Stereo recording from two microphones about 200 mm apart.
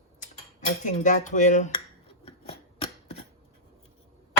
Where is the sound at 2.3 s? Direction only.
30° left (ahead or behind).